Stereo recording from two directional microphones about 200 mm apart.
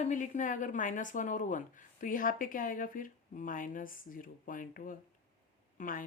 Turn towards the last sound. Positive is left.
turn(degrees=40)  # may be behind; listen again after turning